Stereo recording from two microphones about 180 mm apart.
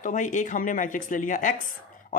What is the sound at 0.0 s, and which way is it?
A woman's voice, 45° left (ahead or behind).